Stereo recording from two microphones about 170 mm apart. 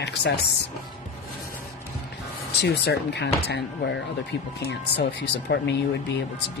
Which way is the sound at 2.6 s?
80° left.